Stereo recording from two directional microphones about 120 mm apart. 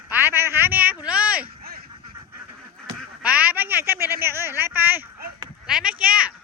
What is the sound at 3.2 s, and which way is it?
A man's voice, 10° right (ahead or behind).